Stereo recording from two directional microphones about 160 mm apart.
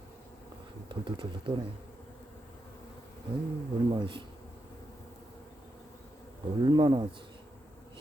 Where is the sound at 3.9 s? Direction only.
30° right (ahead or behind).